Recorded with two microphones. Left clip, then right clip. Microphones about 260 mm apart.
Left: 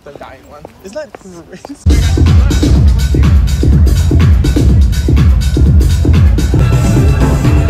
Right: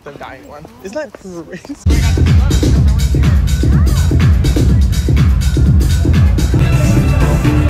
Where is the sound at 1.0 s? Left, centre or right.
Right.